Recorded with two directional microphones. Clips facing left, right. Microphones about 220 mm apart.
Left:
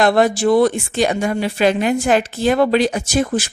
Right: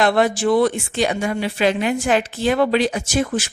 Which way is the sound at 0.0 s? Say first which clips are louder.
Left 3 dB; 40° left (ahead or behind).